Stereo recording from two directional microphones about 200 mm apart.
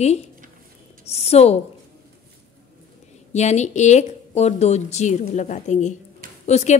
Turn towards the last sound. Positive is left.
turn(degrees=35)  # may be behind; listen again after turning